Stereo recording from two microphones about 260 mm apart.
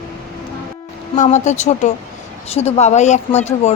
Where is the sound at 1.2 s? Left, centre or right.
Left.